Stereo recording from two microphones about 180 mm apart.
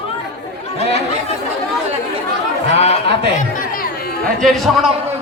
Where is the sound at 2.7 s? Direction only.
35° left (ahead or behind).